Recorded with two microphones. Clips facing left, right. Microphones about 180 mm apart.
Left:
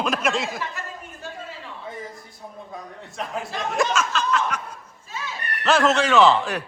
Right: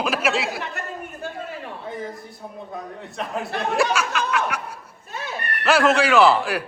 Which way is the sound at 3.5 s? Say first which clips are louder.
Right 4 dB; 60° right (ahead or behind).